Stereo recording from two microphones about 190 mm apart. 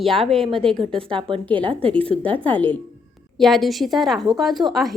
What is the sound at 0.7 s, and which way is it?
Speech, 25° right (ahead or behind).